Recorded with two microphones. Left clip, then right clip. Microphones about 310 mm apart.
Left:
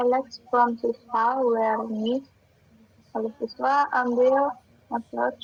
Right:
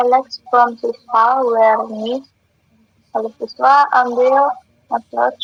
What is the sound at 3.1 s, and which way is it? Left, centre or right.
Speech, right.